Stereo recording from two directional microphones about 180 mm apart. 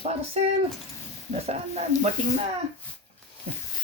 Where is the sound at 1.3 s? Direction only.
35° right (ahead or behind).